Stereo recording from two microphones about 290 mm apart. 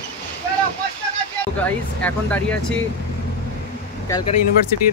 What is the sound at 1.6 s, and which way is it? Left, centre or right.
Speech, centre.